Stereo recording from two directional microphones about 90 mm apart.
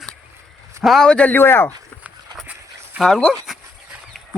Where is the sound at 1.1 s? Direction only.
15° left (ahead or behind).